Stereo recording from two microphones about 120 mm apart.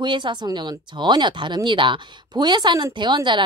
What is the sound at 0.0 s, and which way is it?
Speech, 40° right (ahead or behind).